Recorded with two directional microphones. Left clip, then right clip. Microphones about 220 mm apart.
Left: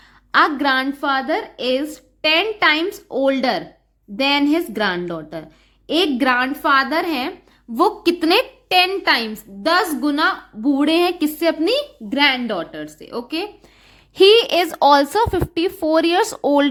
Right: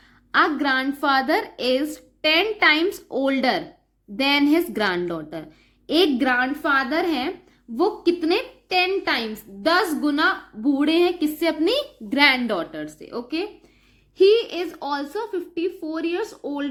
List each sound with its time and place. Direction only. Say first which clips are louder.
0.3 s a woman's voice: left 4 dB; 15° left (ahead or behind)
1.0 s a woman's voice: even; centre (ahead or behind)
7.8 s a woman's voice: left 4 dB; 35° left (ahead or behind); by 13.5 s 20° left (ahead or behind)
14.2 s speech: left 5 dB; 35° left (ahead or behind)